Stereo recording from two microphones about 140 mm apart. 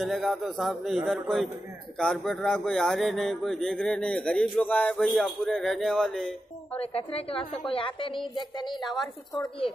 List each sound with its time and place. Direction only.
0.0 s speech: centre (ahead or behind)
6.8 s a woman's voice: 45° left (ahead or behind)